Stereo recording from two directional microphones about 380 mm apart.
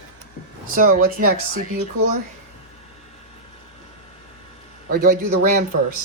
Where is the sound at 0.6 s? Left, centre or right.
Right.